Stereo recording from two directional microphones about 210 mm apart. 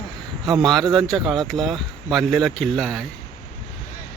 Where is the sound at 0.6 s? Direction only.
Centre (ahead or behind).